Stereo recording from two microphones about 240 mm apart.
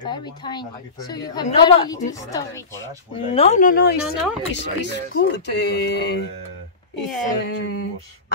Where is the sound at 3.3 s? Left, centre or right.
Left.